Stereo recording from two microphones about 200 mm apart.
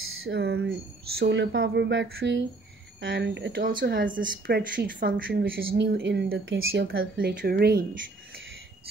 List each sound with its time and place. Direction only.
0.2 s speech: 55° right (ahead or behind)